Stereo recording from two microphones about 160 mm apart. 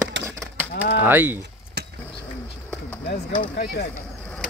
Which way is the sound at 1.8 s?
90° right.